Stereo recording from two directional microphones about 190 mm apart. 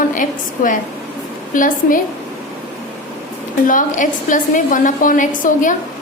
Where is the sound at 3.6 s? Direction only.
45° left (ahead or behind).